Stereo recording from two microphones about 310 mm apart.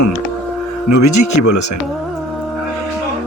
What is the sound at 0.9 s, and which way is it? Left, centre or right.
Speech, left.